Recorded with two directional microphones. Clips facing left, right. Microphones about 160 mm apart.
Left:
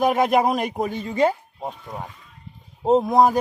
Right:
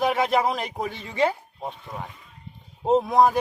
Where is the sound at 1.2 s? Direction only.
15° left (ahead or behind).